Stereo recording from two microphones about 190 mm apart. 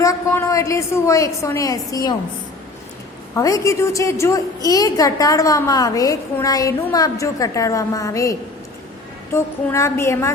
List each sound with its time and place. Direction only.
0.0 s a woman's voice: 15° left (ahead or behind)
3.3 s a woman's voice: 15° left (ahead or behind)